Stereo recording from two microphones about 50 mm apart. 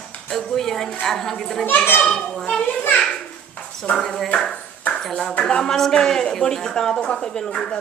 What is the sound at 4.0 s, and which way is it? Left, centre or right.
Speech, centre.